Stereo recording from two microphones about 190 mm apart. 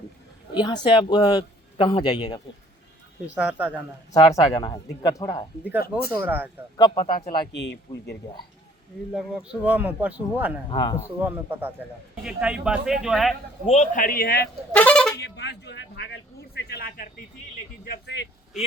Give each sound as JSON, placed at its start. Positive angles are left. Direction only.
{"t": 0.5, "sound": "a man's voice", "side_deg": 20}
{"t": 3.3, "sound": "speech", "side_deg": -10}
{"t": 4.1, "sound": "a man's voice", "side_deg": 20}
{"t": 6.1, "sound": "speech", "side_deg": -10}
{"t": 6.7, "sound": "a man's voice", "side_deg": 20}
{"t": 7.5, "sound": "a man's voice", "side_deg": 65}
{"t": 9.1, "sound": "speech", "side_deg": -5}
{"t": 10.7, "sound": "a man's voice", "side_deg": 20}
{"t": 11.3, "sound": "speech", "side_deg": -10}
{"t": 13.7, "sound": "a man's voice", "side_deg": 40}
{"t": 14.7, "sound": "speech", "side_deg": 5}
{"t": 15.2, "sound": "a man's voice", "side_deg": 65}